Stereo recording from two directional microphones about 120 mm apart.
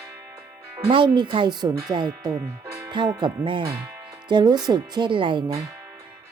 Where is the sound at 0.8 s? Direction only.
45° right (ahead or behind).